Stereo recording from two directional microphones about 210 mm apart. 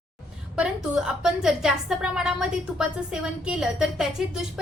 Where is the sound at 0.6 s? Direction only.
5° right (ahead or behind).